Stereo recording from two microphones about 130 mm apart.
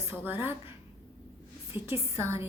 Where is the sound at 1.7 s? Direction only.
20° right (ahead or behind).